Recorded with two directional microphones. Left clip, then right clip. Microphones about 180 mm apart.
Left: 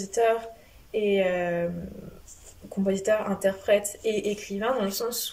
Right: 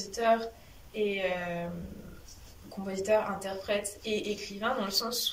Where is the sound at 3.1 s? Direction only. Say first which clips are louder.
Left 2 dB; 50° left (ahead or behind).